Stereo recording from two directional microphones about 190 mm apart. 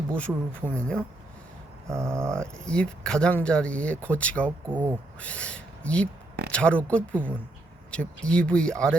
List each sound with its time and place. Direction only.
0.1 s speech: 5° left (ahead or behind)
1.9 s speech: 15° right (ahead or behind)
2.3 s speech: 5° left (ahead or behind)
4.7 s speech: 10° right (ahead or behind)
5.2 s speech: 5° left (ahead or behind)